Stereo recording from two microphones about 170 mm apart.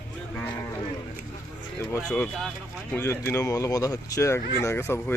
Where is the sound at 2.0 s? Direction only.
5° left (ahead or behind).